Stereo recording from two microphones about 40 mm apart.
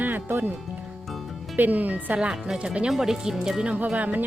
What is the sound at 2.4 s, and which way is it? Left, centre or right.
Speech, right.